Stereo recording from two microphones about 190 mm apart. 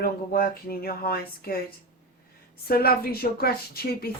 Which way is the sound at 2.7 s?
50° left (ahead or behind).